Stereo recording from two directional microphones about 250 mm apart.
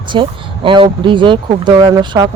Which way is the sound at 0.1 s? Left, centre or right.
Centre.